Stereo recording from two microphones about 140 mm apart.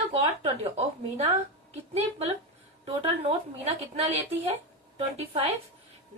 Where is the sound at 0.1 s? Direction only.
45° right (ahead or behind).